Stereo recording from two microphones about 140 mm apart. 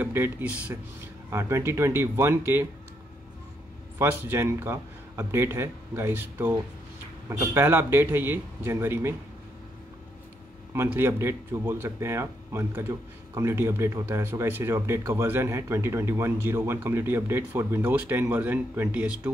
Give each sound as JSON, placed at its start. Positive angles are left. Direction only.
{"t": 0.0, "sound": "speech", "side_deg": -15}
{"t": 4.0, "sound": "speech", "side_deg": -15}
{"t": 10.7, "sound": "speech", "side_deg": -15}